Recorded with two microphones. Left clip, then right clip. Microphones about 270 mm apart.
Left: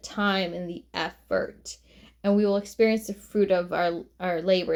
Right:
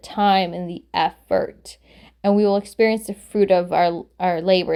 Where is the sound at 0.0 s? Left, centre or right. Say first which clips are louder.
Right 9 dB; right.